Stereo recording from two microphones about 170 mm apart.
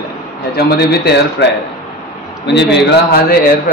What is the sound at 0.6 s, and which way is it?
Speech, 75° left (ahead or behind).